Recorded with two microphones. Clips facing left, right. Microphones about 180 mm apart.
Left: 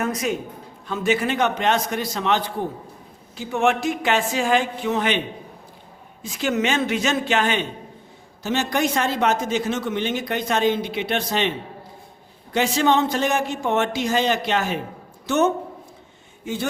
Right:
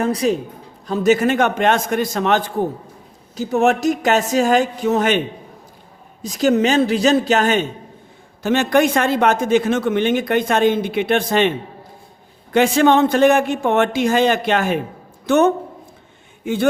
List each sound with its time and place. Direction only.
0.0 s a man's voice: 35° right (ahead or behind)
6.2 s a man's voice: 40° right (ahead or behind)
8.4 s speech: 60° right (ahead or behind)
12.5 s speech: 55° right (ahead or behind)